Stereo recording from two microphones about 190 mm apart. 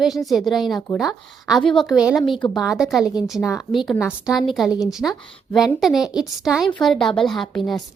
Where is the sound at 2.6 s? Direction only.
5° right (ahead or behind).